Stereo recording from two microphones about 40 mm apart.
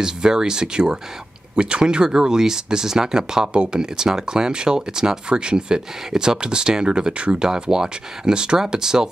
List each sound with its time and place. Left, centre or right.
0.0 s speech: centre